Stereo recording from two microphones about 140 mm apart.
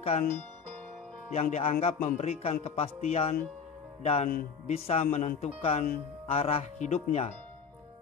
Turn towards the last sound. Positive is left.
turn(degrees=50)  # may be behind; listen again after turning